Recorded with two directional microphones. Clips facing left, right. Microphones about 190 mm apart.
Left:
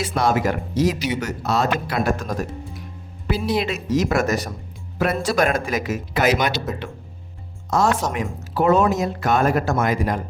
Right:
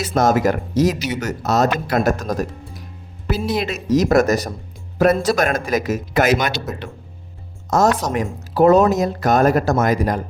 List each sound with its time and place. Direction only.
0.0 s speech: 40° right (ahead or behind)
7.7 s speech: 40° right (ahead or behind)